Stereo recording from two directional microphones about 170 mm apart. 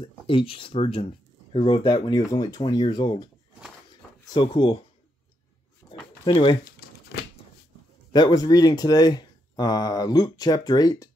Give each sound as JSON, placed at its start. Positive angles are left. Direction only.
{"t": 0.0, "sound": "speech", "side_deg": 30}
{"t": 4.3, "sound": "speech", "side_deg": 30}
{"t": 5.8, "sound": "a sound", "side_deg": 15}
{"t": 6.2, "sound": "speech", "side_deg": 30}
{"t": 8.1, "sound": "speech", "side_deg": 25}